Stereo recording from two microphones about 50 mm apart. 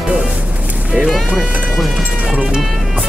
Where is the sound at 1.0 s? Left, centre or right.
Centre.